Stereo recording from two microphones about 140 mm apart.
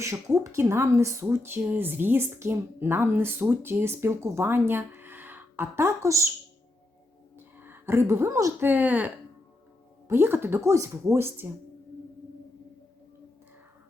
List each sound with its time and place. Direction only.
0.0 s speech: 20° right (ahead or behind)
7.3 s speech: 15° right (ahead or behind)
8.7 s speech: 10° right (ahead or behind)